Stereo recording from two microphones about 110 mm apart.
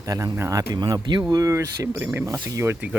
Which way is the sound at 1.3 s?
30° right (ahead or behind).